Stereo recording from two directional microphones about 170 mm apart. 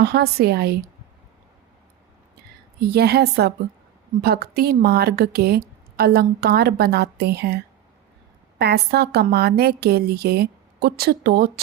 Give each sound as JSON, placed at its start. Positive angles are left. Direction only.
{"t": 0.0, "sound": "a woman's voice", "side_deg": -70}
{"t": 2.8, "sound": "a woman's voice", "side_deg": -70}